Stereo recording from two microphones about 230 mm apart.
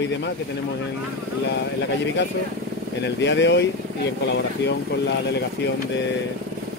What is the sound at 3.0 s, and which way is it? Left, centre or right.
Speech, left.